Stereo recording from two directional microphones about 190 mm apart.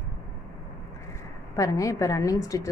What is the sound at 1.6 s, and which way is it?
A woman's voice, 15° left (ahead or behind).